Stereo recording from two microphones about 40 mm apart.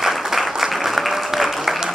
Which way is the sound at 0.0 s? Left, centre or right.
Centre.